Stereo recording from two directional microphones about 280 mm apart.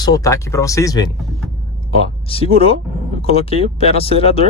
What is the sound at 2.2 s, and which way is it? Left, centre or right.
Speech, centre.